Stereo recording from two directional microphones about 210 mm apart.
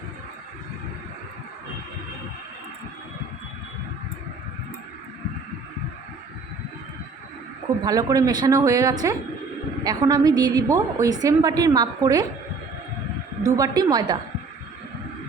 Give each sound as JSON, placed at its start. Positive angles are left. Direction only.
{"t": 7.9, "sound": "a woman's voice", "side_deg": -15}
{"t": 13.4, "sound": "a woman's voice", "side_deg": -20}